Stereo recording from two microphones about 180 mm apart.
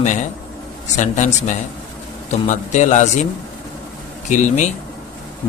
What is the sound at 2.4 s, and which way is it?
Speech, 40° left (ahead or behind).